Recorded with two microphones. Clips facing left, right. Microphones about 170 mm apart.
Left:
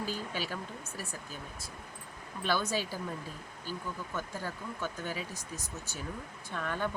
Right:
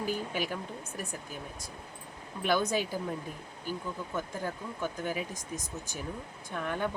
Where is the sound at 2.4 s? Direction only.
15° right (ahead or behind).